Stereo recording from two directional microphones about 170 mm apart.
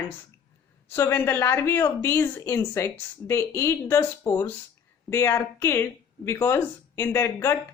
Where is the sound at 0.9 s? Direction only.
15° left (ahead or behind).